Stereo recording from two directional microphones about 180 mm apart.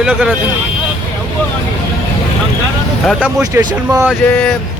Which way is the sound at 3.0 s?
5° right (ahead or behind).